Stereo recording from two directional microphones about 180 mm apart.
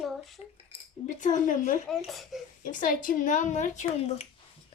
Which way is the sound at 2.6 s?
50° left (ahead or behind).